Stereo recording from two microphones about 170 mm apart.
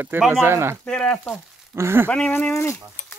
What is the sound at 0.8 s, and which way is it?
Speech, 5° left (ahead or behind).